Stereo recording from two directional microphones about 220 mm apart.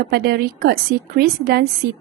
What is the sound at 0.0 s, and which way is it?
Speech, 45° right (ahead or behind).